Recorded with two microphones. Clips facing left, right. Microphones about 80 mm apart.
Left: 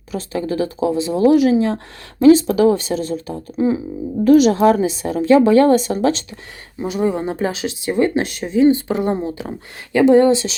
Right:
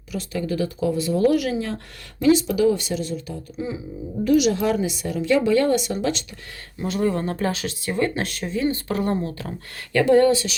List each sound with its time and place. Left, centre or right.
0.1 s speech: left
2.2 s a woman's voice: left
6.7 s speech: centre